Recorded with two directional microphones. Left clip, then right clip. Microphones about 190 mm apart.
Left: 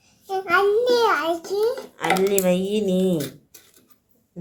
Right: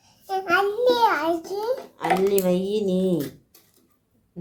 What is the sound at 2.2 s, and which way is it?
Speech, 5° left (ahead or behind).